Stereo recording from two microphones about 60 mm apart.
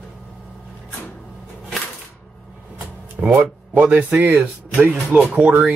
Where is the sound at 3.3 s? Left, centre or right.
Right.